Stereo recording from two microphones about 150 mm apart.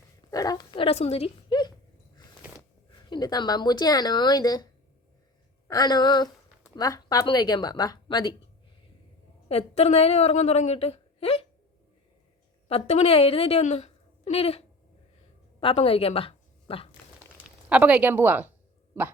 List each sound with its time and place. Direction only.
0.3 s speech: 25° left (ahead or behind); by 1.3 s 45° left (ahead or behind)
1.5 s a sound: 30° left (ahead or behind)
3.1 s speech: 25° left (ahead or behind)
9.5 s a woman's voice: 40° left (ahead or behind)
12.6 s a woman's voice: 40° left (ahead or behind)
15.6 s a woman's voice: 40° left (ahead or behind)
17.7 s speech: 10° right (ahead or behind)